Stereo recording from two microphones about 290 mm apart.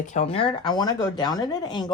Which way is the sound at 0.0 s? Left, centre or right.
Left.